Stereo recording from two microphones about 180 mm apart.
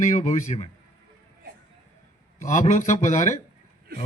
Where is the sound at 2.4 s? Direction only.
45° left (ahead or behind).